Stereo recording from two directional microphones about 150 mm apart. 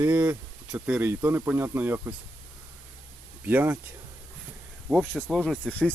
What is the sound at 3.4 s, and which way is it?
Speech, 15° right (ahead or behind).